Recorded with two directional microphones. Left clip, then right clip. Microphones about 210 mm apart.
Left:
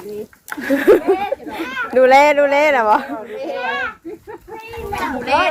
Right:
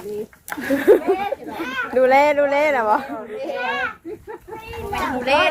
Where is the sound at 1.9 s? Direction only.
30° left (ahead or behind).